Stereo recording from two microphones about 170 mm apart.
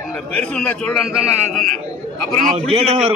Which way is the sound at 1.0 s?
5° right (ahead or behind).